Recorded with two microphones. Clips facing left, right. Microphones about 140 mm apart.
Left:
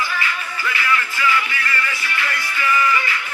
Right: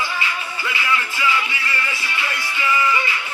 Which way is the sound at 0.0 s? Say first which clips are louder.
Left 1 dB; 20° right (ahead or behind).